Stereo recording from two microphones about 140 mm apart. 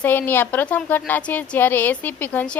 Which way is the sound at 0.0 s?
15° left (ahead or behind).